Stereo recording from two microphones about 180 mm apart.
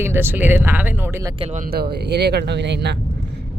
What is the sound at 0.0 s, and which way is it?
Speech, 10° right (ahead or behind).